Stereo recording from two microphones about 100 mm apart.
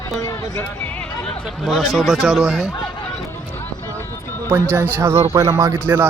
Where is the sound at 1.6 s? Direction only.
Centre (ahead or behind).